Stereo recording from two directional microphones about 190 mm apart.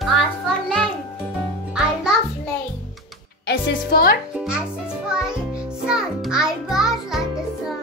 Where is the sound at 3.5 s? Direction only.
55° left (ahead or behind).